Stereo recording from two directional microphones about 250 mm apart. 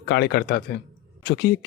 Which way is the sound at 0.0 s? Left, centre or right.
Left.